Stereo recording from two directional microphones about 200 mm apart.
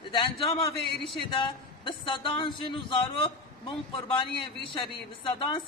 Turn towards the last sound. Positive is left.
turn(degrees=25)  # may be behind; listen again after turning